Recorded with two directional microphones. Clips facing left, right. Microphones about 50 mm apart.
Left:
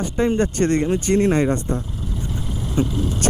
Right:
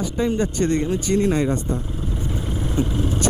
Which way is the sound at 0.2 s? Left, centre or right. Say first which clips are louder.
Left 3 dB; left.